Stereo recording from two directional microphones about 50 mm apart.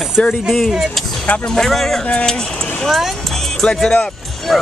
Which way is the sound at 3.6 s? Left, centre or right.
Centre.